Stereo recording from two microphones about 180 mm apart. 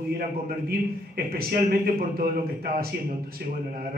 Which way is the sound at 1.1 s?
55° right (ahead or behind).